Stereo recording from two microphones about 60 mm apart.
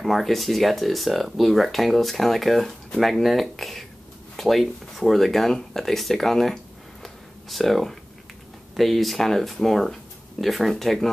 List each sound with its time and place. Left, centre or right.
0.0 s speech: centre